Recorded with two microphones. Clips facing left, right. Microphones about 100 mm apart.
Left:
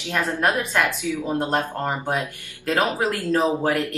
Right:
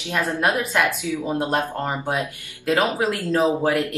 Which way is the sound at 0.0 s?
15° right (ahead or behind).